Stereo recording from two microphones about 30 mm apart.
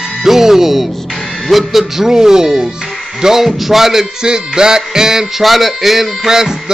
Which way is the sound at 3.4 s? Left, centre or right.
Centre.